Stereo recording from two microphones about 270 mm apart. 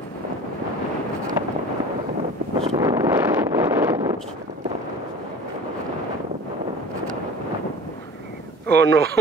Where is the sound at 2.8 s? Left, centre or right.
Centre.